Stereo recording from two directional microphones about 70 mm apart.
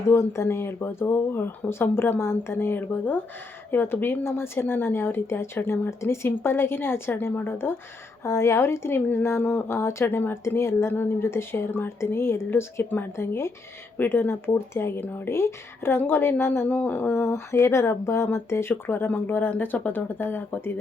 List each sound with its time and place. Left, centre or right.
0.1 s a woman's voice: left
8.2 s a woman's voice: left
16.6 s a woman's voice: left